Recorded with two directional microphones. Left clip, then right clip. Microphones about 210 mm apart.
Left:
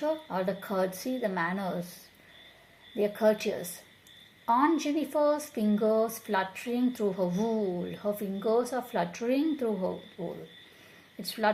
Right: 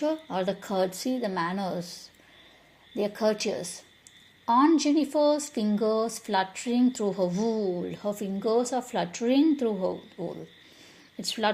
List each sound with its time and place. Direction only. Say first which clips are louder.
0.0 s speech: right 2 dB; 35° right (ahead or behind)
2.9 s speech: left 1 dB; 30° right (ahead or behind)